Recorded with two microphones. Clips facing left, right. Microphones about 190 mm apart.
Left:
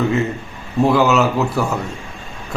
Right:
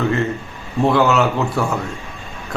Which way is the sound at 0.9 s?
Centre (ahead or behind).